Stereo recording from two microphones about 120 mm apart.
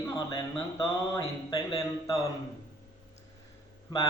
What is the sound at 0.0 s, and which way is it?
Speech, 30° left (ahead or behind).